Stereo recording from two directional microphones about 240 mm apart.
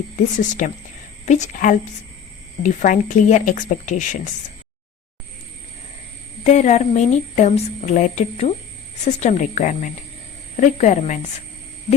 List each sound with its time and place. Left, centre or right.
0.3 s a woman's voice: left
6.4 s a woman's voice: left